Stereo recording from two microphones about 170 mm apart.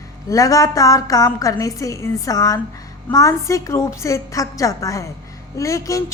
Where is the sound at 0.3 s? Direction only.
20° left (ahead or behind).